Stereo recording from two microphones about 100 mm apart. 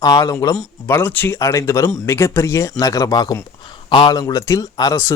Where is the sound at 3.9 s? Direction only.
50° left (ahead or behind).